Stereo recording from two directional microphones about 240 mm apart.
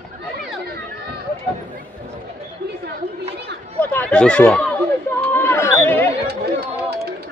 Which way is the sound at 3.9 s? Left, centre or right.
Centre.